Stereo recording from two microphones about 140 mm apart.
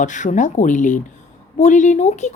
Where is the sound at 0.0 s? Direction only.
60° left (ahead or behind).